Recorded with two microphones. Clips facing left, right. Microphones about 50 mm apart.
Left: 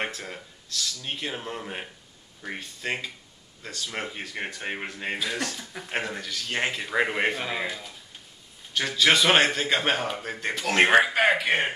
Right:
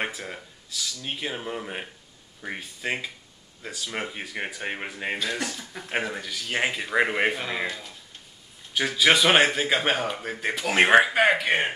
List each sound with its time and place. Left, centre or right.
0.0 s a man's voice: centre
8.7 s a man's voice: centre